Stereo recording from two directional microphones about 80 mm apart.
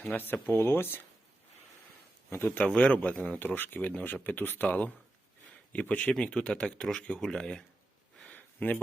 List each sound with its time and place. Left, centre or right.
0.1 s speech: left
2.6 s speech: centre
8.2 s a sound: centre